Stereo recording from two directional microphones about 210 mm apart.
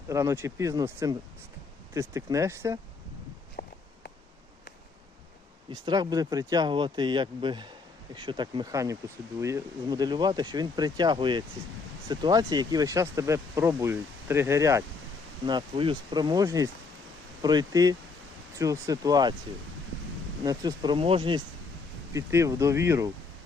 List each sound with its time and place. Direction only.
0.1 s speech: 15° right (ahead or behind)
3.6 s walk: 45° left (ahead or behind)
5.7 s speech: 20° right (ahead or behind)
20.4 s speech: 20° right (ahead or behind)